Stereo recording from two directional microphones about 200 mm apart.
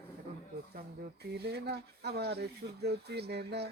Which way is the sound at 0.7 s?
50° right (ahead or behind).